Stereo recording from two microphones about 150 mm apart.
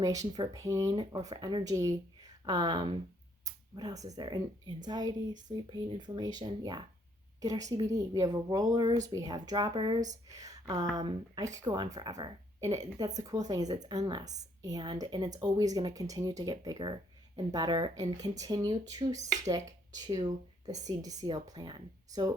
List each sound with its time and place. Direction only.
0.0 s speech: 25° right (ahead or behind)